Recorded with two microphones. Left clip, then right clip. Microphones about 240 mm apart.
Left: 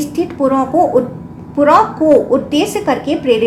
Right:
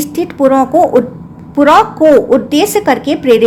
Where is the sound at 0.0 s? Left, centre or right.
Right.